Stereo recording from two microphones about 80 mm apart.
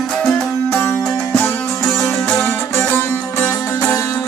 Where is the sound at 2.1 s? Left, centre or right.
Centre; by 4.2 s left.